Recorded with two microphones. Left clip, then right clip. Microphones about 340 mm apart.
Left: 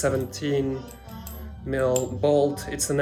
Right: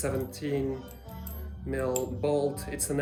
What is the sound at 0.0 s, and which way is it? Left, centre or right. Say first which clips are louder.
Speech: left 7 dB; centre.